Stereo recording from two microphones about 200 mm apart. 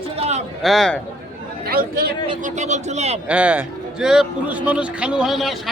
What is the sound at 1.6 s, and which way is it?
Speech, 50° right (ahead or behind).